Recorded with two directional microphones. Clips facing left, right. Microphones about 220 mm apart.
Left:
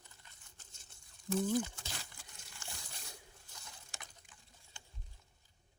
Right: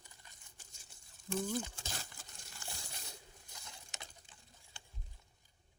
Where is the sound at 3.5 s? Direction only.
20° right (ahead or behind).